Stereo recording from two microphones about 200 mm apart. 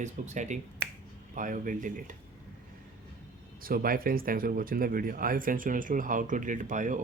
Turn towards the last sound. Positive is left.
turn(degrees=-40)  # may be behind; listen again after turning